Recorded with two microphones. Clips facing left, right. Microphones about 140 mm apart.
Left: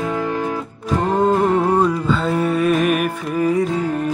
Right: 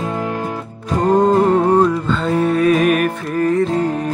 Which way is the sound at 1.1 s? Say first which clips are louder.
Right 3 dB; centre (ahead or behind).